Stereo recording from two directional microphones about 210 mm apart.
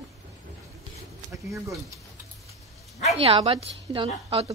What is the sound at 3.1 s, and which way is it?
A woman's voice, 25° right (ahead or behind).